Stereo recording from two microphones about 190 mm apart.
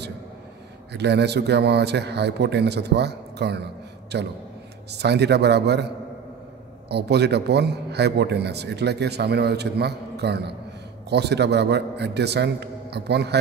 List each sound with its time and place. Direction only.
0.9 s a man's voice: 60° right (ahead or behind)
6.9 s a man's voice: 60° right (ahead or behind)